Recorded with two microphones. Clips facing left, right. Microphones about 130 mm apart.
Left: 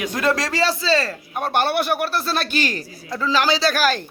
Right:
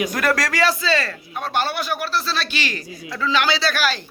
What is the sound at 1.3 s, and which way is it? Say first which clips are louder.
A man's voice: left 3 dB; 55° left (ahead or behind).